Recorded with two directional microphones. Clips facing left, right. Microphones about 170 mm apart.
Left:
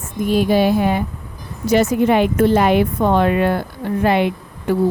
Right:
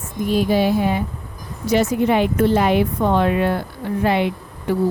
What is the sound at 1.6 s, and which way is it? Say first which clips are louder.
Speech: left 3 dB; 45° left (ahead or behind).